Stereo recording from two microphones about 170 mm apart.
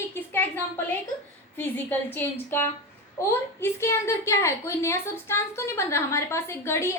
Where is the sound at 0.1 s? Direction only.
10° left (ahead or behind).